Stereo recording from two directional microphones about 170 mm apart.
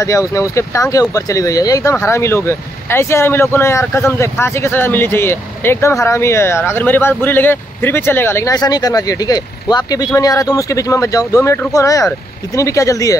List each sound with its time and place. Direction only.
0.0 s speech: 20° left (ahead or behind)